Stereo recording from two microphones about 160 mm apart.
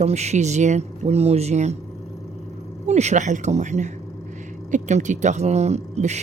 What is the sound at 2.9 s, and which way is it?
Speech, 45° right (ahead or behind).